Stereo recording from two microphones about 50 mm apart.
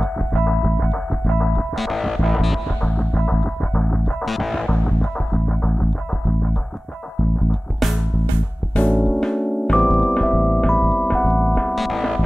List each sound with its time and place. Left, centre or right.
0.0 s music: centre
1.8 s music: centre
2.8 s music: centre
3.3 s music: centre
5.3 s music: centre
8.7 s music: left
9.2 s keyboard: centre
10.1 s music: centre
11.7 s music: centre